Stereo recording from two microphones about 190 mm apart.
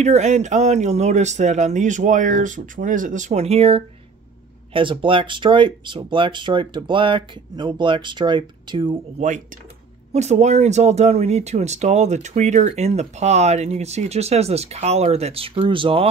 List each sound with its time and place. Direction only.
0.0 s speech: 35° right (ahead or behind)
10.1 s speech: 35° right (ahead or behind)